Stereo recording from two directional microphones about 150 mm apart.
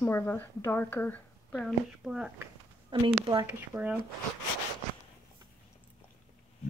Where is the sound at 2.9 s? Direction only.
35° right (ahead or behind).